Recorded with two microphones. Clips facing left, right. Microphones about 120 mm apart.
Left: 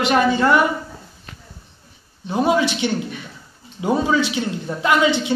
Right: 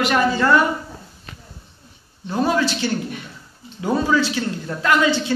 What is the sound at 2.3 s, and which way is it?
A man's voice, 15° left (ahead or behind).